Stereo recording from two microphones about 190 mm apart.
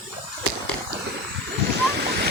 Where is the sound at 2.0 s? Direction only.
60° right (ahead or behind).